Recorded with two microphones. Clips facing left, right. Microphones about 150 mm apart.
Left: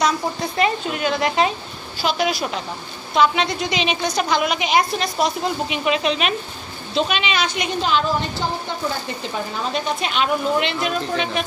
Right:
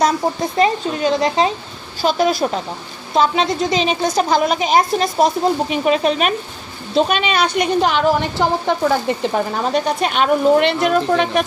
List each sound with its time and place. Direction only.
0.6 s speech: 30° right (ahead or behind)
2.0 s a woman's voice: 40° right (ahead or behind); by 8.9 s 75° right (ahead or behind)
9.3 s a woman's voice: 50° right (ahead or behind)